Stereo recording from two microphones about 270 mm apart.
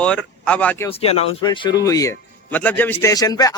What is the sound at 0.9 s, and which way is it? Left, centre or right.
Speech, left.